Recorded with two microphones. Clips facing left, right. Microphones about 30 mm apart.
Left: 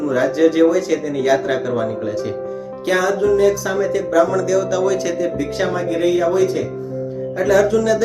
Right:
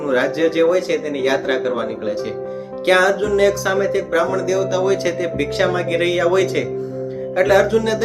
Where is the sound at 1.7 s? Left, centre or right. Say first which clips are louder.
Left 1 dB; right.